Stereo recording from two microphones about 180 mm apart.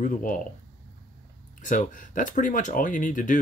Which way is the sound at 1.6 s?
45° left (ahead or behind).